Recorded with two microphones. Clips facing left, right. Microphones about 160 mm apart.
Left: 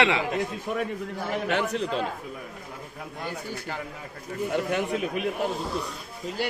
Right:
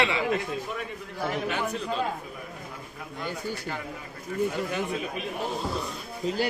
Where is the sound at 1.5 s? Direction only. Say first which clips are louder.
Left 4 dB; 70° left (ahead or behind).